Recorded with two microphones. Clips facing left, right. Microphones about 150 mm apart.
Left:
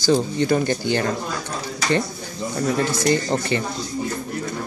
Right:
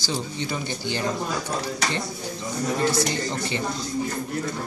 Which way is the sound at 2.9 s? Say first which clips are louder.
Left 5 dB; 50° left (ahead or behind).